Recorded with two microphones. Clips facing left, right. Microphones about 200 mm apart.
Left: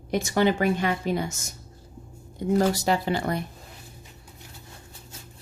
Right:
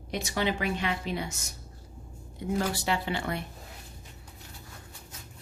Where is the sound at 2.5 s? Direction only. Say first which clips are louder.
Left 7 dB; 40° left (ahead or behind).